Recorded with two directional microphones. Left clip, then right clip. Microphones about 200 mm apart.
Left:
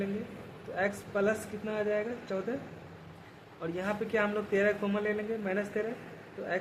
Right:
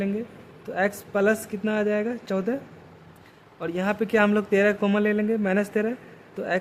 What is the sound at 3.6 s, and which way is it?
Speech, 50° right (ahead or behind).